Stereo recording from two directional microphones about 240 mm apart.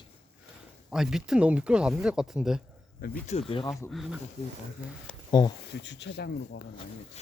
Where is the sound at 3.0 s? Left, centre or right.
Left; by 3.9 s centre.